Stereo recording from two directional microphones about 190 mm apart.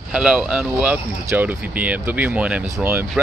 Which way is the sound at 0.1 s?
5° right (ahead or behind).